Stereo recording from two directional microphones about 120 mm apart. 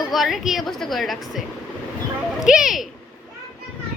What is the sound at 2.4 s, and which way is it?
Speech, 5° right (ahead or behind).